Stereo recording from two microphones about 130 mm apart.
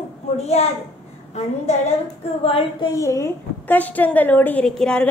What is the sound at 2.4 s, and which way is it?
Child singing, 45° left (ahead or behind).